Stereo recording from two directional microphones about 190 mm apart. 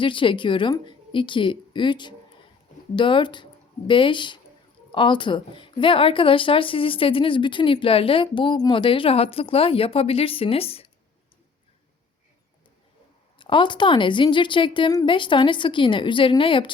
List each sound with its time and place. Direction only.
0.0 s speech: 25° left (ahead or behind)
13.4 s speech: 25° left (ahead or behind)